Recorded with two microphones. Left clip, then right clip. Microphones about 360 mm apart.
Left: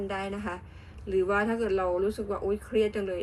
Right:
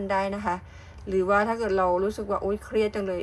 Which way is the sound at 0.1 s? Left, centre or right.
Centre.